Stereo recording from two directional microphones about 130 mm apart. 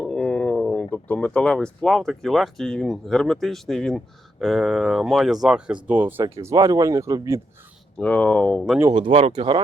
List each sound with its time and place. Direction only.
0.1 s speech: 5° left (ahead or behind); by 7.4 s 20° right (ahead or behind)
7.9 s speech: 10° left (ahead or behind)
8.9 s speech: 40° right (ahead or behind)